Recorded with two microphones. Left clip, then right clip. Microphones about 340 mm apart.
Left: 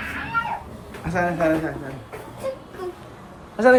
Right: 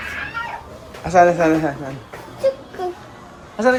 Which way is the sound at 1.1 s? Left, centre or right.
Centre.